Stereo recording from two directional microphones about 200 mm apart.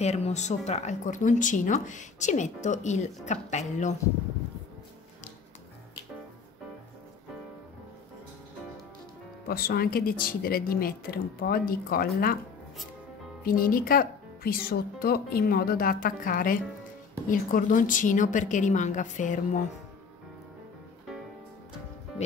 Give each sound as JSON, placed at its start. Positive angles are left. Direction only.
{"t": 0.0, "sound": "speech", "side_deg": 35}
{"t": 9.5, "sound": "speech", "side_deg": 45}
{"t": 13.5, "sound": "speech", "side_deg": 45}